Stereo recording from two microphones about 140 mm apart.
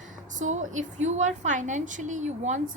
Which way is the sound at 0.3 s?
60° right (ahead or behind).